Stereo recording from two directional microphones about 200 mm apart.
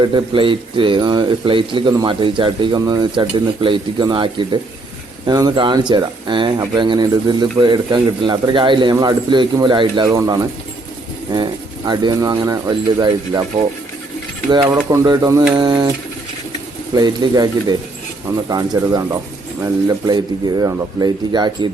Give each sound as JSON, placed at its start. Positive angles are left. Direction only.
{"t": 0.0, "sound": "speech", "side_deg": -25}
{"t": 14.5, "sound": "speech", "side_deg": -20}
{"t": 16.9, "sound": "speech", "side_deg": -20}